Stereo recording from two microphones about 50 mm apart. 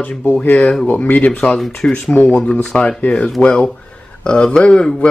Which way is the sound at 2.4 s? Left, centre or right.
Centre.